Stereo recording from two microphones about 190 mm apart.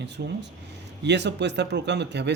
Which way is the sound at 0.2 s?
60° right (ahead or behind).